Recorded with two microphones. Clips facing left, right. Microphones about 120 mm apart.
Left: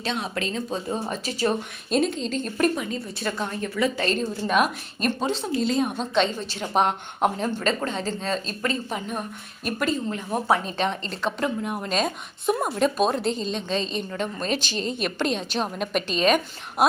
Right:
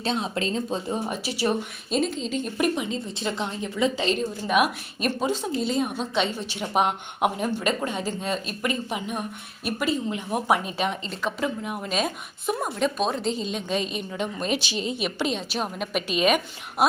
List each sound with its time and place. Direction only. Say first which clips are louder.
0.0 s speech: right 2 dB; 30° right (ahead or behind)
1.0 s a woman's voice: left 1 dB; 10° right (ahead or behind)
1.9 s a woman's voice: left 2 dB; centre (ahead or behind)